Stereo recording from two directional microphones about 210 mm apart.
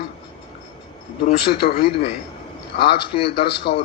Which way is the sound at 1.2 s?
45° left (ahead or behind).